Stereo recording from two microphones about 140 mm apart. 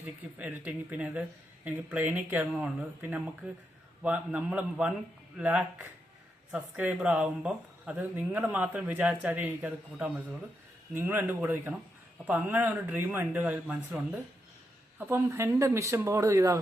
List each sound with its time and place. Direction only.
0.0 s speech: 10° right (ahead or behind)